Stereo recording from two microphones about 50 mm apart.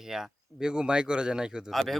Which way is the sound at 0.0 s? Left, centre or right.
Centre.